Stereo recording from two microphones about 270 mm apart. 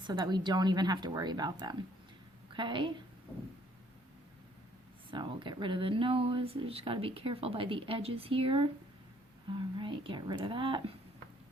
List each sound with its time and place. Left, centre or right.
0.1 s a woman's voice: centre
5.1 s speech: centre
9.7 s speech: centre